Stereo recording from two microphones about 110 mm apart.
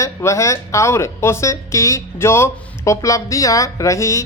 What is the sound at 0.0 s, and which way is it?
Speech, 25° left (ahead or behind).